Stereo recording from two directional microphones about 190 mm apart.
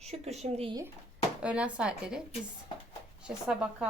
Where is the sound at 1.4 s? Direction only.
5° right (ahead or behind).